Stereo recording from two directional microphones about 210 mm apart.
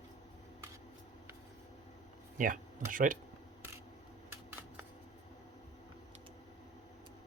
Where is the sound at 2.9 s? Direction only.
40° right (ahead or behind).